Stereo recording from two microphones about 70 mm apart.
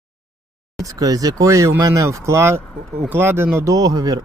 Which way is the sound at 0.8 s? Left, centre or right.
Right.